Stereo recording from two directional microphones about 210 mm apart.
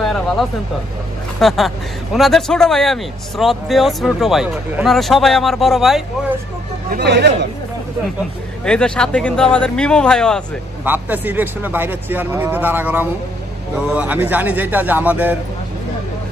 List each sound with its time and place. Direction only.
0.0 s vehicle: centre (ahead or behind)
1.4 s speech: centre (ahead or behind)
6.9 s speech: 50° right (ahead or behind)
8.6 s speech: 5° left (ahead or behind)
10.8 s speech: 10° right (ahead or behind)